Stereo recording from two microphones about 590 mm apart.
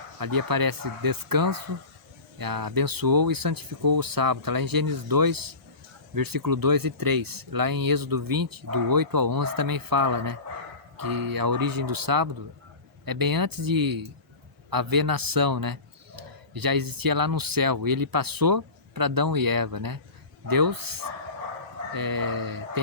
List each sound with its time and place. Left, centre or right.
0.2 s a man's voice: right